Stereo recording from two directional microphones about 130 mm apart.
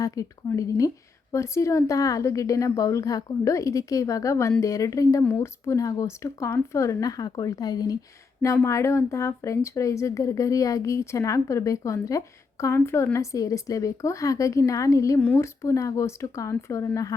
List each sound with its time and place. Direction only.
0.0 s speech: 25° left (ahead or behind)